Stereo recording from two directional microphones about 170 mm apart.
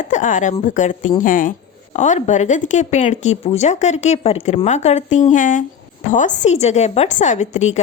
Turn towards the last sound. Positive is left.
turn(degrees=40)  # may be behind; listen again after turning